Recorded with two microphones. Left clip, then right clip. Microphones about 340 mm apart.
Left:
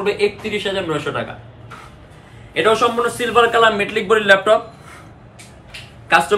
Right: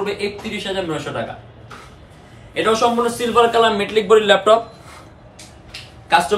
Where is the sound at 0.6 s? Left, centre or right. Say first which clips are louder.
Left 1 dB; centre.